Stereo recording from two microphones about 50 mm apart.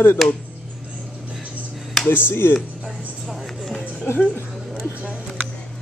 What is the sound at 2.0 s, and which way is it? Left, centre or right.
Speech, left.